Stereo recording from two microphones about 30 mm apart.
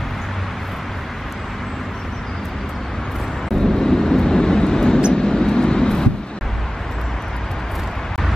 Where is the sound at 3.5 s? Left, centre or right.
Centre.